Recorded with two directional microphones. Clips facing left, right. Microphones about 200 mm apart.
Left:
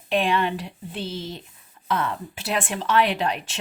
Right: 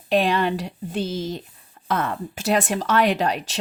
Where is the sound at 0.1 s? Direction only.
40° right (ahead or behind).